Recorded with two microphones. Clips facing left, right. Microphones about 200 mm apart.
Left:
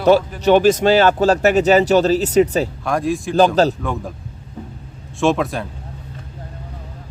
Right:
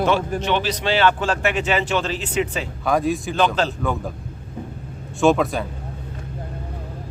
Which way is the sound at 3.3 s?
40° left (ahead or behind).